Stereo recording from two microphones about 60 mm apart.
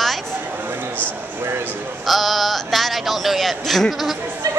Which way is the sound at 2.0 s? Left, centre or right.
Centre.